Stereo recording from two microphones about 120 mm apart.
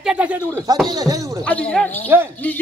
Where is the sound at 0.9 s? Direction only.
30° right (ahead or behind).